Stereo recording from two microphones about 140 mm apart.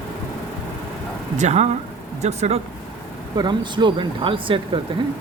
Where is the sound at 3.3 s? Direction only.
30° right (ahead or behind).